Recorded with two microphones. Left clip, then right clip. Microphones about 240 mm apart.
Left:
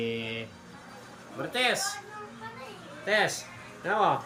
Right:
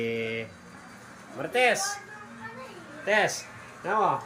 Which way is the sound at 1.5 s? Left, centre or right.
Centre.